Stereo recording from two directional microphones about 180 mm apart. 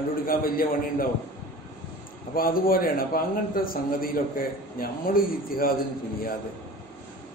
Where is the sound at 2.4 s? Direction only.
55° left (ahead or behind).